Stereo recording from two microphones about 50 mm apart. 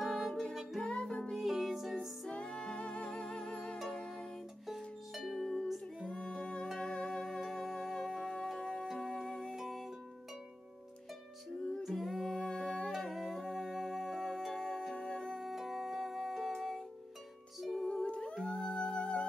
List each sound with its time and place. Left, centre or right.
0.1 s music: centre
0.8 s music: left
1.3 s music: centre
2.2 s music: centre
3.7 s music: centre
4.0 s music: centre
4.6 s music: centre
6.0 s music: centre
9.6 s music: centre
11.8 s music: centre
15.4 s music: centre
18.0 s music: left